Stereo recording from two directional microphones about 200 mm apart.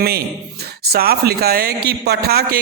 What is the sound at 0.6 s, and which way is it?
A man's voice, 50° right (ahead or behind).